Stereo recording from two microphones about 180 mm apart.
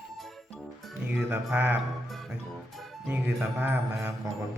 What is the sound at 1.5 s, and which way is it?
Mantra, 10° right (ahead or behind).